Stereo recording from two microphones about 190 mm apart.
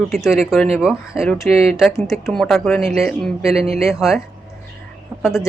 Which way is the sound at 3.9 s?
Centre (ahead or behind).